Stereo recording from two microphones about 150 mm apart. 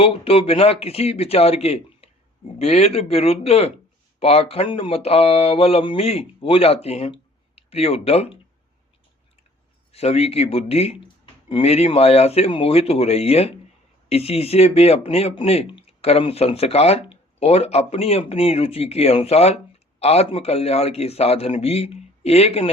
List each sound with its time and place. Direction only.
0.0 s speech: 40° left (ahead or behind)
9.9 s speech: 40° left (ahead or behind)